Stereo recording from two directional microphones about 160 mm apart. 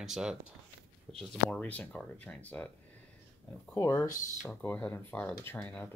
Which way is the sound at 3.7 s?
20° left (ahead or behind).